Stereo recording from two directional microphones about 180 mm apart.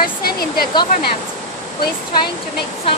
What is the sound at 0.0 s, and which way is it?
Speech, 55° left (ahead or behind).